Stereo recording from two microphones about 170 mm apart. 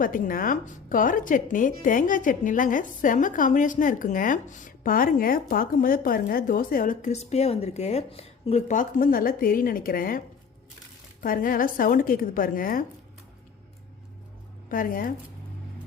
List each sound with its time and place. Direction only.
0.0 s speech: 55° left (ahead or behind)
14.7 s speech: 55° left (ahead or behind)